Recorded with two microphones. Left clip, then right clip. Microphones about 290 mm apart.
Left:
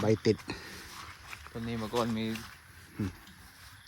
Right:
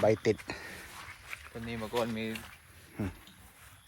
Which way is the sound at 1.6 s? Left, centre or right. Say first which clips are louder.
Left 1 dB; left.